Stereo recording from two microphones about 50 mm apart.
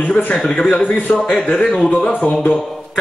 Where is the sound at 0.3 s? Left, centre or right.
Centre.